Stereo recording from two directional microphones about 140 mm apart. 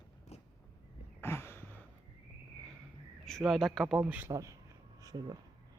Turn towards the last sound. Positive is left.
turn(degrees=-30)  # may be behind; listen again after turning